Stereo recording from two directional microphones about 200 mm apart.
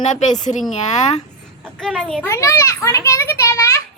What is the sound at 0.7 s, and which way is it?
Speech, 35° left (ahead or behind).